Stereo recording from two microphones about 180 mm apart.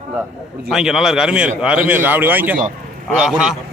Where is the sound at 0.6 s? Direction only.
Centre (ahead or behind).